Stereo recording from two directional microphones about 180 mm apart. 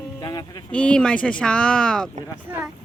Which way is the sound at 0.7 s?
5° left (ahead or behind).